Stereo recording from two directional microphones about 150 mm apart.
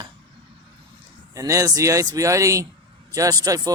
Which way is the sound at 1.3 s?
20° right (ahead or behind).